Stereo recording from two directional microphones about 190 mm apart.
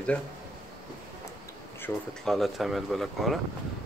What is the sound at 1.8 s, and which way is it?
Speech, centre (ahead or behind).